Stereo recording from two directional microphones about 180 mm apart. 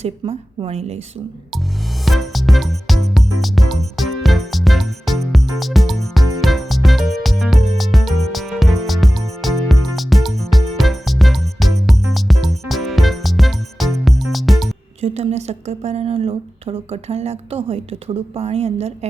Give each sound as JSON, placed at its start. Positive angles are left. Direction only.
{"t": 0.0, "sound": "a woman's voice", "side_deg": -35}
{"t": 2.0, "sound": "music", "side_deg": 0}
{"t": 15.0, "sound": "a woman's voice", "side_deg": -35}